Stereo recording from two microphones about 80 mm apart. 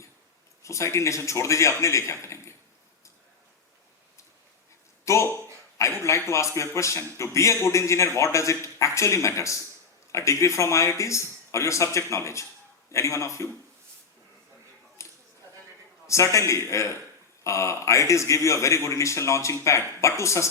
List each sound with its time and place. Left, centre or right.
0.6 s a man's voice: left
5.0 s a man's voice: left
15.0 s a sound: left
16.0 s a man's voice: left